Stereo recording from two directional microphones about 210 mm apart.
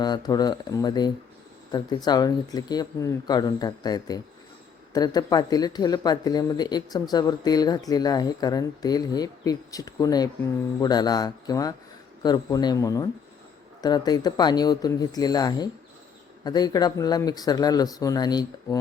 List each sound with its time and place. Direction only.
0.0 s a man's voice: 20° left (ahead or behind)